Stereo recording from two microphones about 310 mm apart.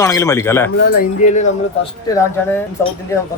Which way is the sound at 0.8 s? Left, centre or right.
Left.